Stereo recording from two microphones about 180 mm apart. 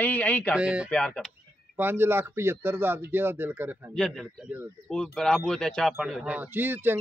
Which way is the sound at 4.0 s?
Centre (ahead or behind).